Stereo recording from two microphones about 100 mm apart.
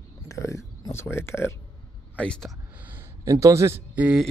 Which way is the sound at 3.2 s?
35° right (ahead or behind).